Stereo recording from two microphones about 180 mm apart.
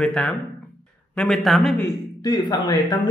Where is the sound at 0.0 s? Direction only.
5° left (ahead or behind).